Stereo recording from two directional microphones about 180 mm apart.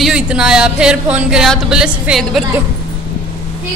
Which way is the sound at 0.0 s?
5° right (ahead or behind).